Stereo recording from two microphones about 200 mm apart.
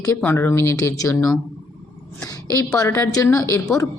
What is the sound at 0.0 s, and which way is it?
A woman's voice, 10° left (ahead or behind).